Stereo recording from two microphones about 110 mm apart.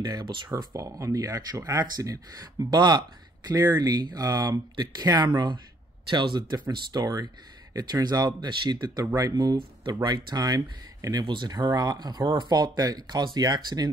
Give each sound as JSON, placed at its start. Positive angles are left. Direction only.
{"t": 0.0, "sound": "speech", "side_deg": -45}
{"t": 0.5, "sound": "speech", "side_deg": -30}